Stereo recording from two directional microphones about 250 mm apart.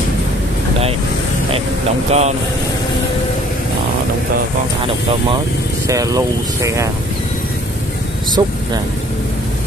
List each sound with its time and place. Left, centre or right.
2.0 s speech: right
5.9 s speech: centre
8.4 s speech: centre